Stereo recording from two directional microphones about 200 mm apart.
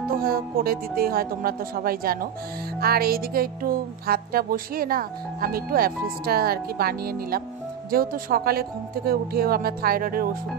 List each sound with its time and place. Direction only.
0.2 s speech: 50° right (ahead or behind)